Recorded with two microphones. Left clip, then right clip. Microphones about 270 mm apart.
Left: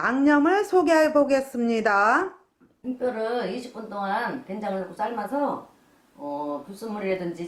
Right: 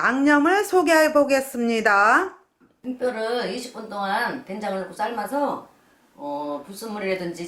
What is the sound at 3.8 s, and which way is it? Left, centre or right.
Speech, centre.